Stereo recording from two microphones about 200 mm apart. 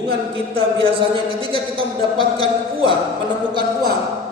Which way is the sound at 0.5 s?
25° right (ahead or behind).